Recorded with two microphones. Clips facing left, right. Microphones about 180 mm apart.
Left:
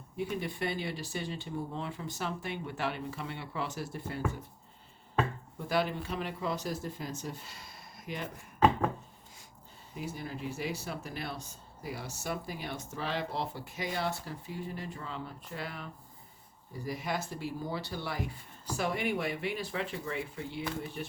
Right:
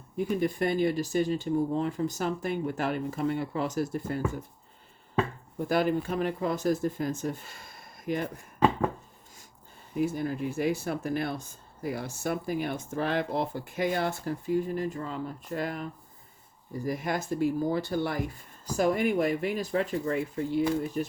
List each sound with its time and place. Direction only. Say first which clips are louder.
0.2 s speech: right 7 dB; 45° right (ahead or behind)
5.5 s speech: right 6 dB; 50° right (ahead or behind)
9.9 s speech: right 11 dB; 50° right (ahead or behind)